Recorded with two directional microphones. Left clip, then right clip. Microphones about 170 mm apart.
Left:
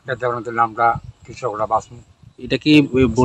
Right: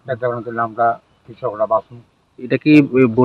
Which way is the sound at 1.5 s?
20° left (ahead or behind).